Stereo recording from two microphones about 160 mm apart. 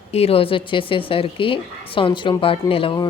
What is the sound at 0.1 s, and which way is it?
Speech, 40° left (ahead or behind).